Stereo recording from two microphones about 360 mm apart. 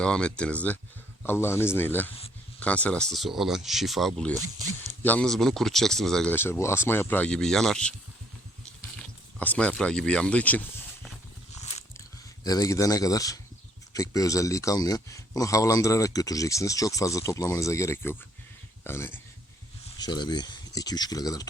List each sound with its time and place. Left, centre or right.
0.0 s speech: centre
4.4 s speech: right
5.0 s speech: centre
9.4 s speech: centre
11.6 s a sound: centre
13.9 s speech: centre